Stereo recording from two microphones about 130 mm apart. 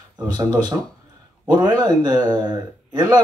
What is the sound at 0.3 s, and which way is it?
A man's voice, 30° right (ahead or behind).